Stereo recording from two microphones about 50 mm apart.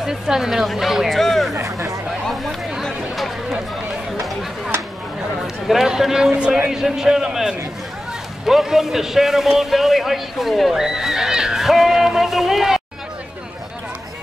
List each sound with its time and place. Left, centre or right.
0.0 s a man's voice: centre
1.1 s speech: centre
1.5 s speech: right
2.2 s speech: centre
2.8 s chatter: centre
4.2 s a sound: centre
5.7 s a man's voice: centre